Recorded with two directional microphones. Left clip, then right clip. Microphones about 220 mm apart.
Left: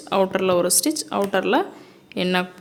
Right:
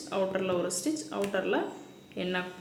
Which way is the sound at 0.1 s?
55° left (ahead or behind).